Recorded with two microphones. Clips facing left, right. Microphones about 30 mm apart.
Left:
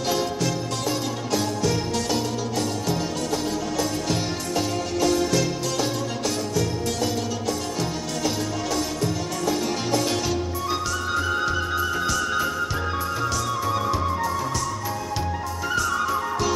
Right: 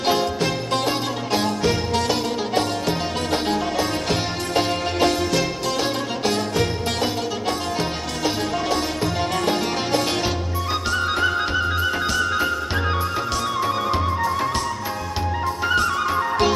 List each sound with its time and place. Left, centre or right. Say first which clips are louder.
0.0 s music: right 4 dB; right
8.2 s music: right 4 dB; right
9.4 s music: right 3 dB; right
10.1 s music: right 2 dB; right
13.6 s music: right 3 dB; right
15.6 s music: right 3 dB; right